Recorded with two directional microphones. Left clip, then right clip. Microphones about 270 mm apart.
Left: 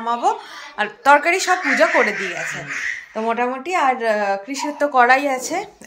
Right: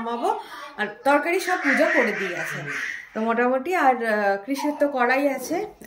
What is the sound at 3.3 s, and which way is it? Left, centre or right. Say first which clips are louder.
A woman's voice: even; centre.